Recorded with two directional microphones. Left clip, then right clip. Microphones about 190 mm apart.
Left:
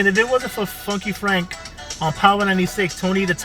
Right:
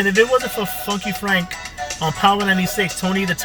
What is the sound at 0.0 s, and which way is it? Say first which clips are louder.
Speech: right 2 dB; 20° right (ahead or behind).